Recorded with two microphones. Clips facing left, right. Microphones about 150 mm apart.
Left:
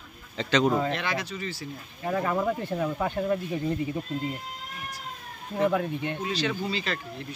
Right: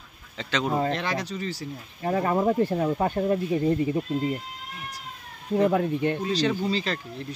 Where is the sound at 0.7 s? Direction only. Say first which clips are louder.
Right 2 dB; 35° right (ahead or behind).